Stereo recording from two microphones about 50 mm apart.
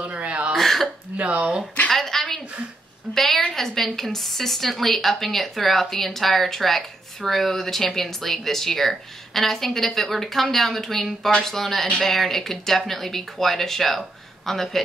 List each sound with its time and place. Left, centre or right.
0.1 s throat clearing: right
0.6 s throat clearing: centre
1.1 s speech: right
1.9 s a sound: centre
3.5 s a woman's voice: centre